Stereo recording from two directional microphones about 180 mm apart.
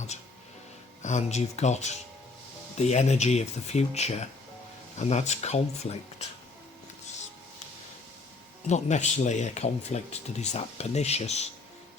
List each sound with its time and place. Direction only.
1.0 s speech: 40° left (ahead or behind)
8.6 s speech: 40° left (ahead or behind)